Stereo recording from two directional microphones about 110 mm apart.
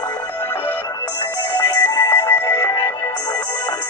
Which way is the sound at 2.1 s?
35° left (ahead or behind).